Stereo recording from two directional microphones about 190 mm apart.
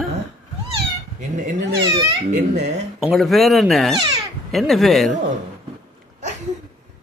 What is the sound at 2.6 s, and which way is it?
Speech, 35° right (ahead or behind).